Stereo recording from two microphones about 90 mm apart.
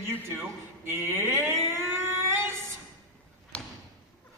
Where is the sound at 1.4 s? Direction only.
30° right (ahead or behind).